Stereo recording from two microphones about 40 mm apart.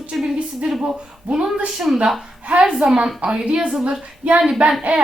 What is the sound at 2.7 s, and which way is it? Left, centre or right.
Speech, centre.